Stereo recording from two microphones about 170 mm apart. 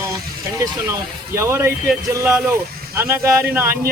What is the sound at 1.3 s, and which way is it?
Speech, 15° right (ahead or behind).